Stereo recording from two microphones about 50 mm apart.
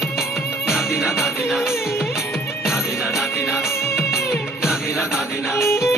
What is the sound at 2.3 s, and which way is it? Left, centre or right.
Music, centre.